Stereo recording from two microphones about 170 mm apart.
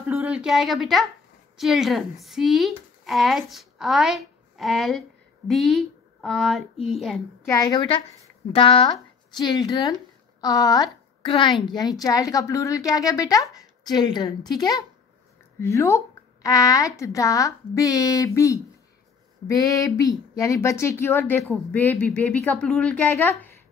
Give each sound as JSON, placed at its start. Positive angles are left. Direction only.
{"t": 0.1, "sound": "speech", "side_deg": -5}
{"t": 7.4, "sound": "a woman's voice", "side_deg": 20}